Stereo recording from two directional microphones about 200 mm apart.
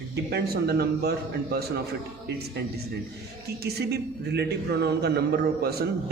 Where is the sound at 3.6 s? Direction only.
55° right (ahead or behind).